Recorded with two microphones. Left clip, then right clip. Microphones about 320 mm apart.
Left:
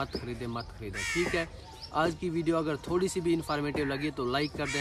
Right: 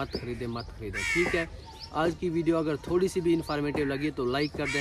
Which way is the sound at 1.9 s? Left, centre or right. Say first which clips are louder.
Right 1 dB; centre.